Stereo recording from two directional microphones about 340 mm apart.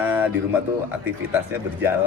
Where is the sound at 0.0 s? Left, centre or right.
Centre.